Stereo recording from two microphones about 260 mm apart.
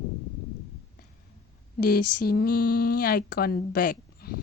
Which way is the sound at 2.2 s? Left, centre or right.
Left.